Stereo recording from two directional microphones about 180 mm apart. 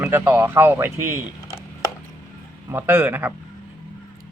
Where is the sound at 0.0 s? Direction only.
10° right (ahead or behind).